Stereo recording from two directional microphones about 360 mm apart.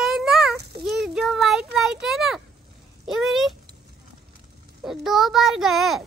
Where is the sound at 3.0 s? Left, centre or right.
Centre.